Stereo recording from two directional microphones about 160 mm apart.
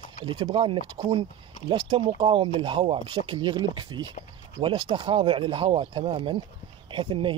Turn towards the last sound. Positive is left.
turn(degrees=-30)  # may be behind; listen again after turning